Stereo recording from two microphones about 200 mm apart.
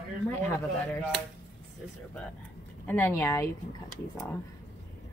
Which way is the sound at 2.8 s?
10° left (ahead or behind).